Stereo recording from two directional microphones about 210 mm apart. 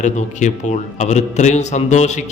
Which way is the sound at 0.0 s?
35° left (ahead or behind).